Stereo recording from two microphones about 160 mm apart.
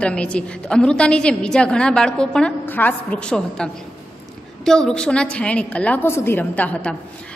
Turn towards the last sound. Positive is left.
turn(degrees=10)  # may be behind; listen again after turning